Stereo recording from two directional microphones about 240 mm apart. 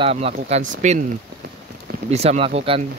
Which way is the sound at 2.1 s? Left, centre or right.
Right.